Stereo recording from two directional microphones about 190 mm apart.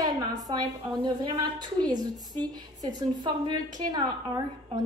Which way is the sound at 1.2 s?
20° right (ahead or behind).